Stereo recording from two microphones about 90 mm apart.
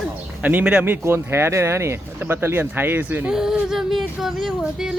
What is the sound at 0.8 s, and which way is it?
Speech, 25° right (ahead or behind).